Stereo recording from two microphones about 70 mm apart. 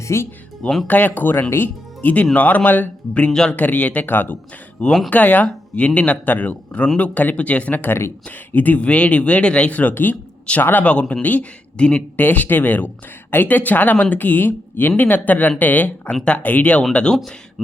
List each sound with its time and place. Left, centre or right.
0.0 s speech: left
0.6 s speech: centre
0.9 s speech: left
3.2 s speech: centre
3.5 s speech: left
4.8 s speech: centre
5.1 s speech: left